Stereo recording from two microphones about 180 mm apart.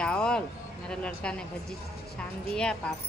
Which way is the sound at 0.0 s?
5° left (ahead or behind).